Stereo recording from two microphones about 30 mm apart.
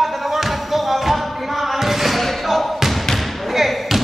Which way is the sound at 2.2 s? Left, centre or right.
Centre.